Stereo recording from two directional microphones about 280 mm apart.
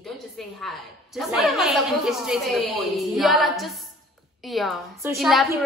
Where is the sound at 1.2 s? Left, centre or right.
Centre.